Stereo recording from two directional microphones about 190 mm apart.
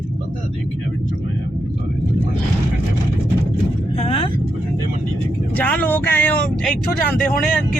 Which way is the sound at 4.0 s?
30° left (ahead or behind).